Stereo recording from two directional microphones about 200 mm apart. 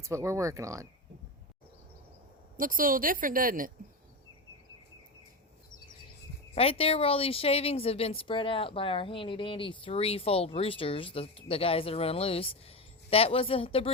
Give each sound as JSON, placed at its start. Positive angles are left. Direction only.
{"t": 0.0, "sound": "speech", "side_deg": -15}
{"t": 2.6, "sound": "a woman's voice", "side_deg": -45}
{"t": 6.5, "sound": "speech", "side_deg": 30}